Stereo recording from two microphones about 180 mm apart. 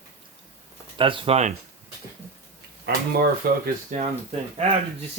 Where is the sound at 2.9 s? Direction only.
60° right (ahead or behind).